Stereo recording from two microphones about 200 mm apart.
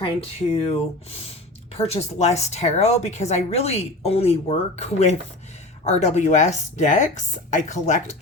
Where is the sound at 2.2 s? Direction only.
35° left (ahead or behind).